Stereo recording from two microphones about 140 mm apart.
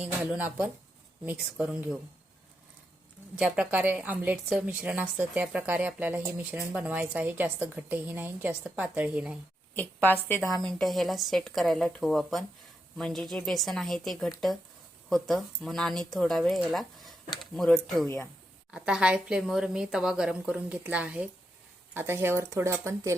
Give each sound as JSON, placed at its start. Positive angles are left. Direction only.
{"t": 0.0, "sound": "a woman's voice", "side_deg": -10}
{"t": 3.3, "sound": "a woman's voice", "side_deg": -10}
{"t": 9.7, "sound": "a woman's voice", "side_deg": 15}
{"t": 10.5, "sound": "a woman's voice", "side_deg": 0}